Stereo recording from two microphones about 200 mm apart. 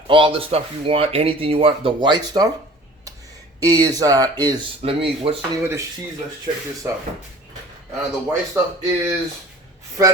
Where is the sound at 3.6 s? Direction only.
20° right (ahead or behind).